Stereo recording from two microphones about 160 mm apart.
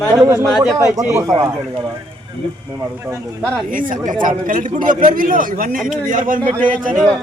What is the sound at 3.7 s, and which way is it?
A man's voice, 55° right (ahead or behind).